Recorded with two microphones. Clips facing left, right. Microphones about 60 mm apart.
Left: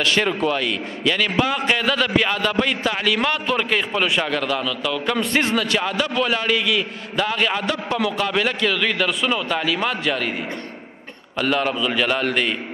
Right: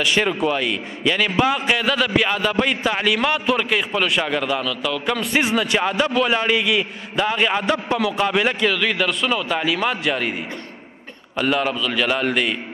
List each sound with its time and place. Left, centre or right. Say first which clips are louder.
0.0 s a man's voice: even; centre
4.2 s a man's voice: right 1 dB; centre
8.7 s a man's voice: even; centre
9.8 s a man's voice: right 1 dB; centre
11.3 s a man's voice: right 1 dB; centre
11.7 s a man's voice: even; centre